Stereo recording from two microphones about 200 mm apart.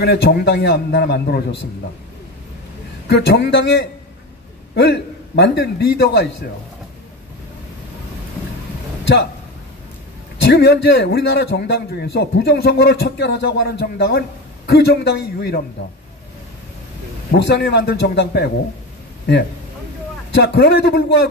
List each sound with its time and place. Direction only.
0.0 s a man's voice: 55° left (ahead or behind)
3.1 s a man's voice: 55° left (ahead or behind)
9.0 s speech: 60° left (ahead or behind)
10.4 s a man's voice: 55° left (ahead or behind)
17.3 s a man's voice: 55° left (ahead or behind)
20.4 s a man's voice: 55° left (ahead or behind)